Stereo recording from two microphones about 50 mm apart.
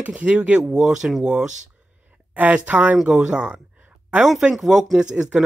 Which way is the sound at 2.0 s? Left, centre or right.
Right.